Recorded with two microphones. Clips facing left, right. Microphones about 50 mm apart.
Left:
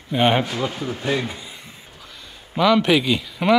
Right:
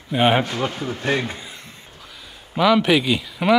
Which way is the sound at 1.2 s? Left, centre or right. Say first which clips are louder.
Right 1 dB; centre.